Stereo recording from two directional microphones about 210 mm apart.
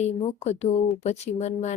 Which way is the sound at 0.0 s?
30° left (ahead or behind).